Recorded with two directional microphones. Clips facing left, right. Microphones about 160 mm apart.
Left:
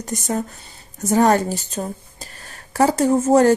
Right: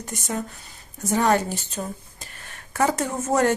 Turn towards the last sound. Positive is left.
turn(degrees=30)  # may be behind; listen again after turning